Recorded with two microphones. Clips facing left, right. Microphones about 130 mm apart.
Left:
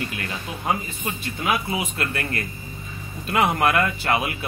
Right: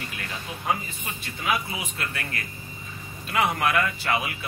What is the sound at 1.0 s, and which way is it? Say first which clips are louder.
Speech: left 4 dB; 60° left (ahead or behind).